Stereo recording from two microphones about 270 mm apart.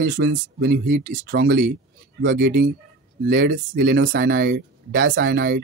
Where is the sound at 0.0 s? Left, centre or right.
Right.